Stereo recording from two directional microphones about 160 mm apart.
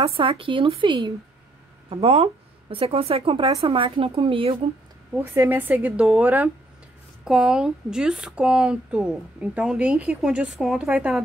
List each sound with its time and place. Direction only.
0.0 s speech: 35° right (ahead or behind)
5.1 s speech: 15° right (ahead or behind)